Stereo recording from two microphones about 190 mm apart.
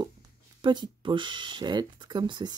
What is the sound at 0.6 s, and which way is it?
Speech, 25° right (ahead or behind).